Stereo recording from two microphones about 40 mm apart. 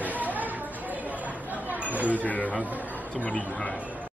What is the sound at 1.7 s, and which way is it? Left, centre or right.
Chatter, right.